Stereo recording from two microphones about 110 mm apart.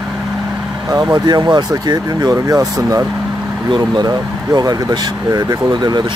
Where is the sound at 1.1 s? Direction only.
40° right (ahead or behind).